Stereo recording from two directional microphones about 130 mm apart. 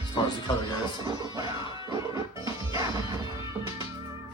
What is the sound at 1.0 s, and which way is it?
Music, 30° right (ahead or behind).